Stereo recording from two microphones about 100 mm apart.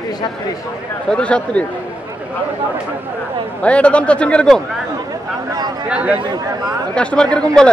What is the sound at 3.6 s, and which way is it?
Speech, 10° left (ahead or behind).